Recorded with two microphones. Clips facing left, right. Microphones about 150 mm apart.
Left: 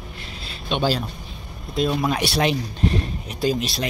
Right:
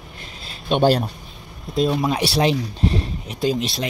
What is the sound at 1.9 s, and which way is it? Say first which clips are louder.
Speech: right 1 dB; 15° right (ahead or behind).